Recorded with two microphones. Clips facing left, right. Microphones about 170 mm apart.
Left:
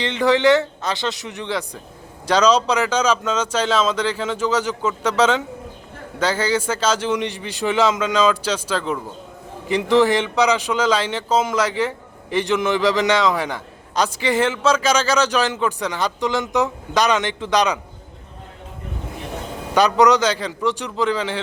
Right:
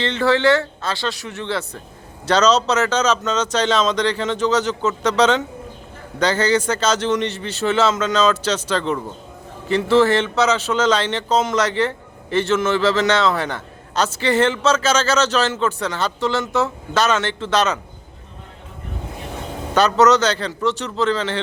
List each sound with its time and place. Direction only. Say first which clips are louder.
0.0 s a man's voice: even; 15° left (ahead or behind)
19.7 s a man's voice: even; 10° left (ahead or behind)